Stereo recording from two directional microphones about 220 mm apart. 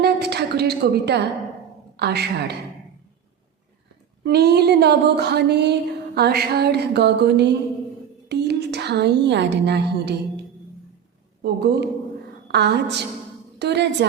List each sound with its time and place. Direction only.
0.0 s a sound: 50° right (ahead or behind)
2.0 s speech: 50° right (ahead or behind)
4.2 s a woman's voice: 45° right (ahead or behind)
11.4 s speech: 45° right (ahead or behind)